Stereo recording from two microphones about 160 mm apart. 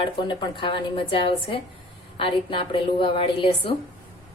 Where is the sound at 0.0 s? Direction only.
30° left (ahead or behind).